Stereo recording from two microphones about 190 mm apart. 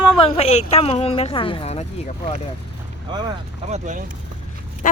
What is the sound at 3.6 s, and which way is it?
Speech, 40° right (ahead or behind).